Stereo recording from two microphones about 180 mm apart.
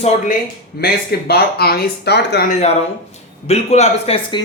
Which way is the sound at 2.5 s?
40° left (ahead or behind).